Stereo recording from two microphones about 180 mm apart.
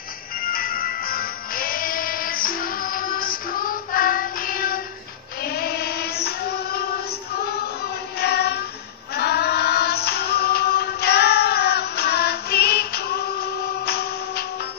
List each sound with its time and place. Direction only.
0.4 s music: 55° left (ahead or behind)
5.4 s child singing: 60° left (ahead or behind)
8.2 s child singing: 65° left (ahead or behind)
9.1 s music: 65° left (ahead or behind)